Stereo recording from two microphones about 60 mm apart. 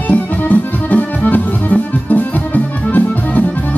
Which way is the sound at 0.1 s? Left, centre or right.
Left.